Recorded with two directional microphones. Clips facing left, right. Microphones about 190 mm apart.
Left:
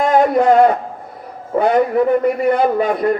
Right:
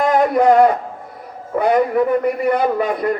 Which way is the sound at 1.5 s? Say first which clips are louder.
Left 1 dB; 25° left (ahead or behind).